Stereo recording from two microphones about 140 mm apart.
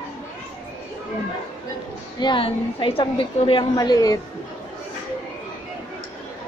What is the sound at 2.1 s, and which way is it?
A woman's voice, 35° left (ahead or behind).